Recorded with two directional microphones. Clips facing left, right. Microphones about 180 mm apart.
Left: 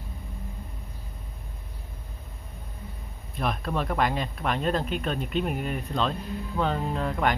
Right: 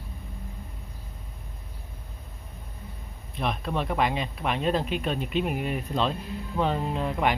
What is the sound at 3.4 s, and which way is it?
Speech, centre (ahead or behind).